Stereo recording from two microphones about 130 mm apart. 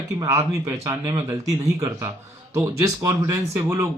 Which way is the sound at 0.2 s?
25° right (ahead or behind).